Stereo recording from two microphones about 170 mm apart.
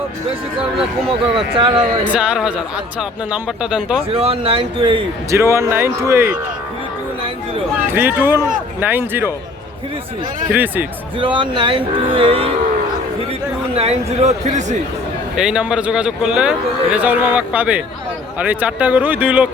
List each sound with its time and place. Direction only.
1.4 s speech: 30° right (ahead or behind)
1.7 s speech: 10° right (ahead or behind)
4.1 s speech: 35° right (ahead or behind)
5.3 s a man's voice: 15° right (ahead or behind)
7.9 s a man's voice: 10° right (ahead or behind)
10.5 s a man's voice: 10° right (ahead or behind)
11.2 s speech: 30° right (ahead or behind)
13.7 s speech: 40° right (ahead or behind)
15.4 s a man's voice: 5° right (ahead or behind)